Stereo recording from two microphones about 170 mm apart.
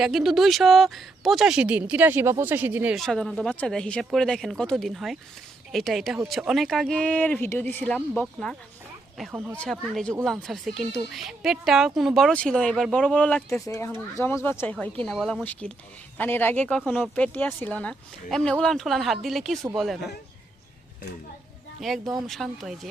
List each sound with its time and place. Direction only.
0.0 s a woman's voice: centre (ahead or behind)
2.9 s a woman's voice: centre (ahead or behind)
9.6 s a woman's voice: 5° left (ahead or behind)
15.0 s a woman's voice: centre (ahead or behind)
21.8 s a woman's voice: centre (ahead or behind)